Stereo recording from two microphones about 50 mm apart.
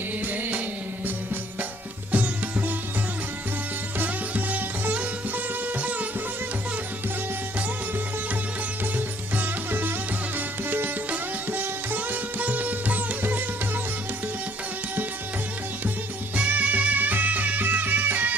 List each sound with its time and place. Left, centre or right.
0.3 s music: right
2.1 s music: right
3.9 s sitar: right
5.8 s music: right
9.0 s music: right
16.3 s music: right